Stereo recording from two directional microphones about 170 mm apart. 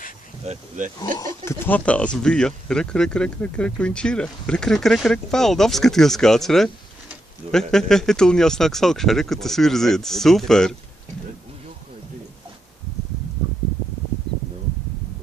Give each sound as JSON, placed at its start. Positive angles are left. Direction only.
{"t": 0.5, "sound": "speech", "side_deg": -45}
{"t": 1.1, "sound": "speech", "side_deg": 15}
{"t": 7.7, "sound": "speech", "side_deg": 5}